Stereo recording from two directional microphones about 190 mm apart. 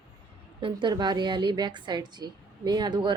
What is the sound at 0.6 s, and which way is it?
A woman's voice, 25° right (ahead or behind).